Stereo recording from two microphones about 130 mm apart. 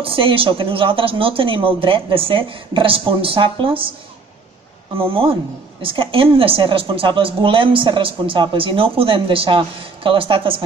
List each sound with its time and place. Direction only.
0.0 s a woman's voice: 45° right (ahead or behind)
4.9 s a woman's voice: 45° right (ahead or behind)